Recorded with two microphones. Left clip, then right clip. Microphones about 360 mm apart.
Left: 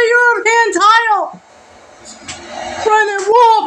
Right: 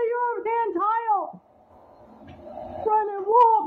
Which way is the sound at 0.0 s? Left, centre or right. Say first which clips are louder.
Left 14 dB; right.